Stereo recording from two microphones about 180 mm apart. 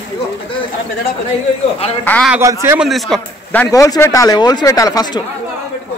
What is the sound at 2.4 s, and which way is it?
Speech, 15° right (ahead or behind).